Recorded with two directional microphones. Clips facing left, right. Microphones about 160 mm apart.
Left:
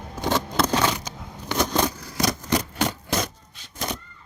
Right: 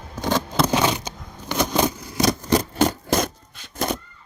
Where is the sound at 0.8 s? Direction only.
20° right (ahead or behind).